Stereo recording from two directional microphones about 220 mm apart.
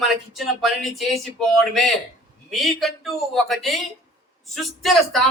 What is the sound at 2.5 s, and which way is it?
Speech, centre (ahead or behind).